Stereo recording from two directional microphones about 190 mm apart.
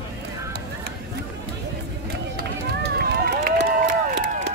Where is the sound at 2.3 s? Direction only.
60° right (ahead or behind).